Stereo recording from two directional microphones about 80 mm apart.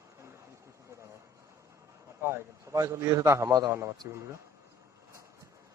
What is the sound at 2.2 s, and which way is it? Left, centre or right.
Speech, right.